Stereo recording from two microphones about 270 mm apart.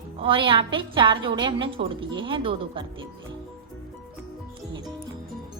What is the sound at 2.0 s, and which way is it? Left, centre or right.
Speech, right.